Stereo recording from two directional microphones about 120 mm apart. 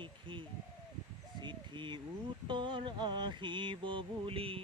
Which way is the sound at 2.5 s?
40° right (ahead or behind).